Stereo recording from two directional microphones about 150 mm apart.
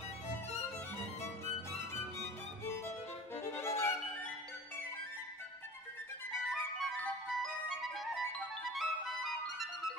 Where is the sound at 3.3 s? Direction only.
15° left (ahead or behind).